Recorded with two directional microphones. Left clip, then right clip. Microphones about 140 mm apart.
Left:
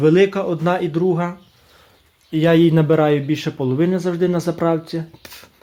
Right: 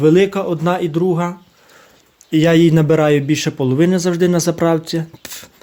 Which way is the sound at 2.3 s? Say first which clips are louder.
Right 2 dB; 30° right (ahead or behind).